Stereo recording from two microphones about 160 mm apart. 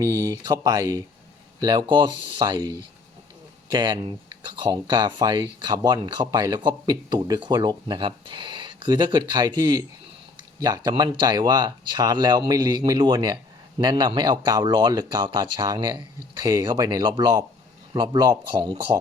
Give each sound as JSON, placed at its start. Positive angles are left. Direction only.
{"t": 0.0, "sound": "speech", "side_deg": -20}